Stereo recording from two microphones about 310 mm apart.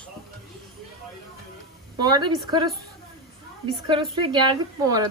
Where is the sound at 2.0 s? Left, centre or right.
Centre.